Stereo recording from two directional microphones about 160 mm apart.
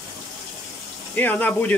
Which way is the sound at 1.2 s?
10° left (ahead or behind).